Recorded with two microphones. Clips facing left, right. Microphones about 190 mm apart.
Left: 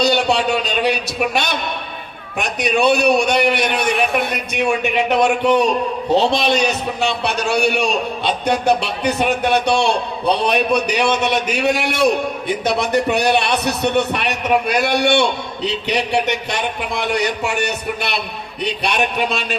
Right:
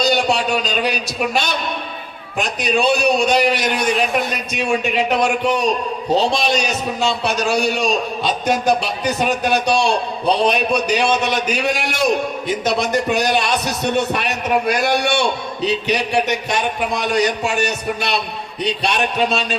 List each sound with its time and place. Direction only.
0.0 s a man's voice: 60° left (ahead or behind)